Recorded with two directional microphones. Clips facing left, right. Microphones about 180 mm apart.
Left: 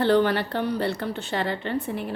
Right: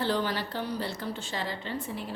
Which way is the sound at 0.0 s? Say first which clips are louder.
Left 9 dB; 60° left (ahead or behind).